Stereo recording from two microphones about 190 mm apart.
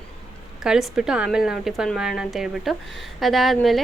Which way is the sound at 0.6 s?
Centre (ahead or behind).